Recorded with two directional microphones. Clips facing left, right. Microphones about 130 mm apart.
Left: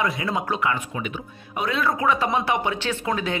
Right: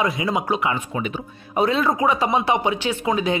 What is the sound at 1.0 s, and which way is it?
Speech, 35° right (ahead or behind).